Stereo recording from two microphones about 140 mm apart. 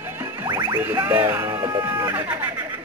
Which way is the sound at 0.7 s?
15° right (ahead or behind).